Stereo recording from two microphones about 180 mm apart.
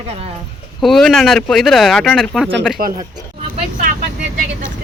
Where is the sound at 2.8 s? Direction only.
50° right (ahead or behind).